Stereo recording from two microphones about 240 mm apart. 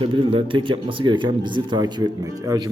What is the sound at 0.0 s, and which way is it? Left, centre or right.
Speech, right.